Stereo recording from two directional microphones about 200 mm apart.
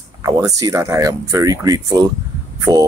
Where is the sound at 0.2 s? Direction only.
15° right (ahead or behind).